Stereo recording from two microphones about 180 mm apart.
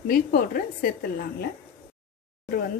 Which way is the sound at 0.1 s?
55° left (ahead or behind).